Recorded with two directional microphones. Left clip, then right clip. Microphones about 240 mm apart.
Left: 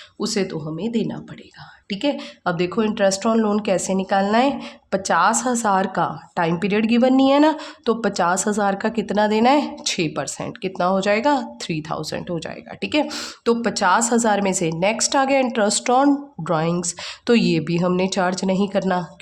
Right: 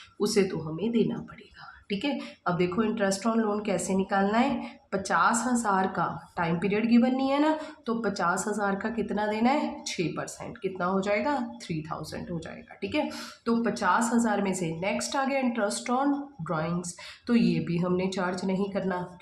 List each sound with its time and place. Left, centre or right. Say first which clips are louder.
0.2 s speech: left 2 dB; left